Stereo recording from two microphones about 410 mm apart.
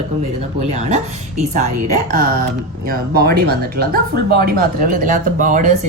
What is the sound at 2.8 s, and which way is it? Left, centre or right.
Speech, right.